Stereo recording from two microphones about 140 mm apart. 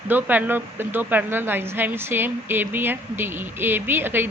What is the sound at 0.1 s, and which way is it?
A woman's voice, 15° right (ahead or behind).